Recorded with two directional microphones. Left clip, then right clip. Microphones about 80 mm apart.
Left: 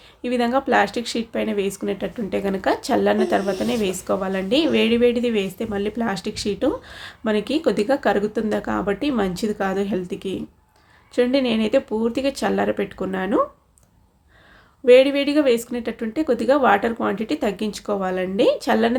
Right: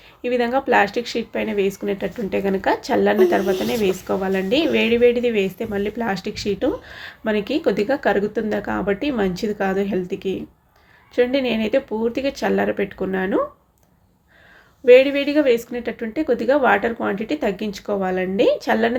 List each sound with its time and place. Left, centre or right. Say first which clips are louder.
0.2 s a woman's voice: right 1 dB; left
3.4 s speech: right 3 dB; centre
3.7 s a woman's voice: right 2 dB; left
14.8 s a woman's voice: right 1 dB; left